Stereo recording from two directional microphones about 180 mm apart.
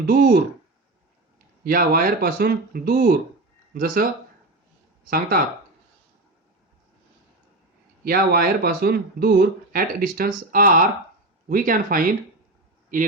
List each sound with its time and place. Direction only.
0.0 s speech: 55° right (ahead or behind)
1.6 s speech: 55° right (ahead or behind)
8.0 s speech: 55° right (ahead or behind)